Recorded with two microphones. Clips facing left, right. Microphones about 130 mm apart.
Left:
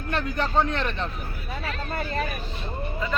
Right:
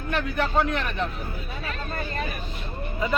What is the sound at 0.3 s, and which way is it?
Speech, 30° left (ahead or behind).